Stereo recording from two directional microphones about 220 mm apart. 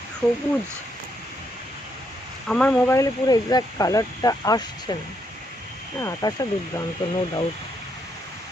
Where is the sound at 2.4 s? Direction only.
Centre (ahead or behind); by 4.9 s 15° left (ahead or behind).